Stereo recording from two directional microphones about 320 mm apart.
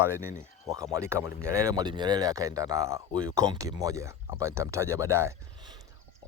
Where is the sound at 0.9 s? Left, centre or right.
Centre.